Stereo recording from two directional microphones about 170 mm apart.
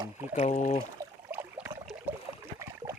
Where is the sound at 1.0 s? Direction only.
15° right (ahead or behind).